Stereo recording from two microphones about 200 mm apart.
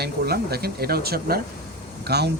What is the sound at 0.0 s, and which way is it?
A man's voice, 50° right (ahead or behind).